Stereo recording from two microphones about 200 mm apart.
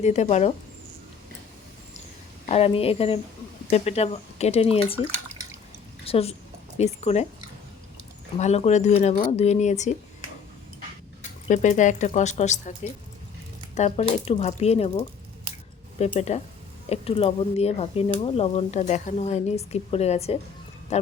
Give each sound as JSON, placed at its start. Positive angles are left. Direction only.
{"t": 0.0, "sound": "speech", "side_deg": 35}
{"t": 2.5, "sound": "a woman's voice", "side_deg": 30}
{"t": 6.1, "sound": "a woman's voice", "side_deg": 30}
{"t": 8.4, "sound": "speech", "side_deg": 35}
{"t": 11.2, "sound": "speech", "side_deg": 40}